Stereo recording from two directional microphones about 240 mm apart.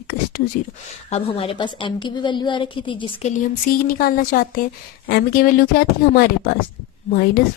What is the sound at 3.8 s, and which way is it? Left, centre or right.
Speech, left.